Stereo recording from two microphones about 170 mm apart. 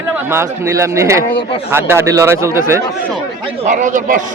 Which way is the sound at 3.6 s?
45° right (ahead or behind).